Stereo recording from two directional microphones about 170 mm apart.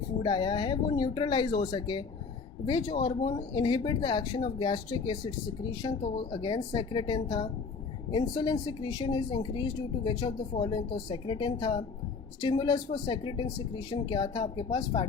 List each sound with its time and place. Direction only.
0.2 s speech: 30° left (ahead or behind)